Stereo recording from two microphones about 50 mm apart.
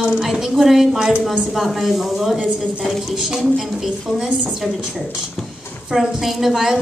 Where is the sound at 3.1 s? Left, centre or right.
Centre.